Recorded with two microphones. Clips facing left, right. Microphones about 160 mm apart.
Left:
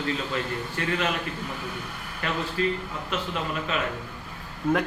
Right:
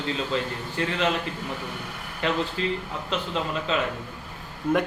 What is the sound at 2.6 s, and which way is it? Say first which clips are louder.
Speech: left 2 dB; 25° right (ahead or behind).